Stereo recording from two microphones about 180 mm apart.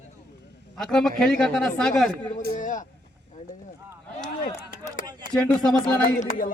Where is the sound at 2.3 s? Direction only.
45° left (ahead or behind).